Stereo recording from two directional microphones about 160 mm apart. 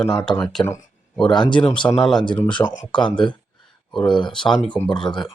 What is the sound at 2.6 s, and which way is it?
Speech, 15° left (ahead or behind).